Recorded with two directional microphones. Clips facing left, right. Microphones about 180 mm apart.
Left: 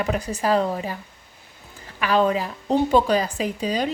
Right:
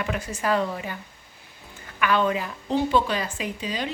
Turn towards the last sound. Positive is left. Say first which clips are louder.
# left 6 dB
turn(degrees=40)  # may be behind; listen again after turning